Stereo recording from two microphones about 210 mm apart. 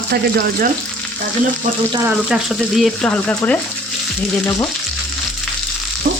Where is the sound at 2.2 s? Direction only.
Centre (ahead or behind).